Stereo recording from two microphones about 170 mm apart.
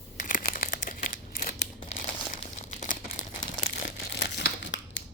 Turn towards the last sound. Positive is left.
turn(degrees=90)